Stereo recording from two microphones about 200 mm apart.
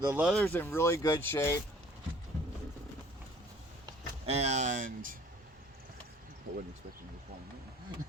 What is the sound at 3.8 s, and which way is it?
Speech, 30° right (ahead or behind).